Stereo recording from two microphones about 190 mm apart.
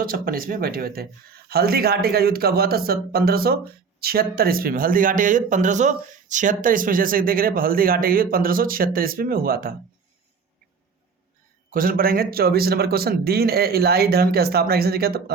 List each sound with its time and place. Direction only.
0.0 s speech: 50° right (ahead or behind)
11.7 s speech: 50° right (ahead or behind)